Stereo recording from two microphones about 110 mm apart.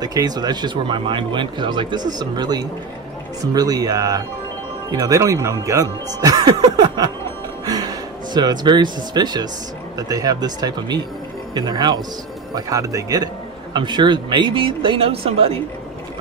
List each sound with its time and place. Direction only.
0.0 s speech: 35° right (ahead or behind)
13.7 s speech: 45° right (ahead or behind); by 15.6 s 60° right (ahead or behind)